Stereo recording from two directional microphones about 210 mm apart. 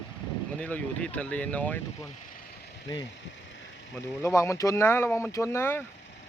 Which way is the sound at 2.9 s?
20° left (ahead or behind).